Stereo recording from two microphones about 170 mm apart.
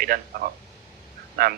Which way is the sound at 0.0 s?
60° right (ahead or behind).